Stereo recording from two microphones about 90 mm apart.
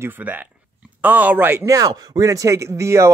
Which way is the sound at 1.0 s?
20° right (ahead or behind).